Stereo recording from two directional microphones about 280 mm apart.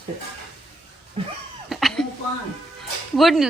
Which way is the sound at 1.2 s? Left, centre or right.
Centre.